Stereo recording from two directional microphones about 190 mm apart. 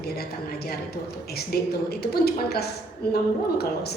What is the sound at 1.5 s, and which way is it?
A woman's voice, 55° left (ahead or behind).